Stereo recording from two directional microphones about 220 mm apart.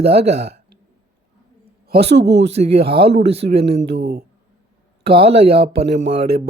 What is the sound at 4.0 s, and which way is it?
Speech, 45° right (ahead or behind).